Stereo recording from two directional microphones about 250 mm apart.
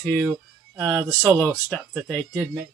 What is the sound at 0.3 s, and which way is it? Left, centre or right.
Music, centre.